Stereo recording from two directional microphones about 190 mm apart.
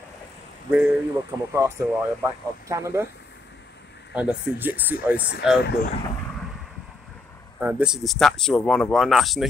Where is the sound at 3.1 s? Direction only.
65° left (ahead or behind).